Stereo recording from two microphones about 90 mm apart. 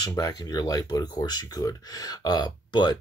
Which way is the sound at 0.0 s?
40° left (ahead or behind).